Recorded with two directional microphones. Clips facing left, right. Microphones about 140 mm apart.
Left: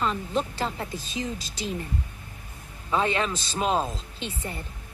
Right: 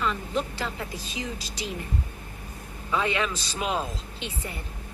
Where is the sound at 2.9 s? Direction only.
35° left (ahead or behind).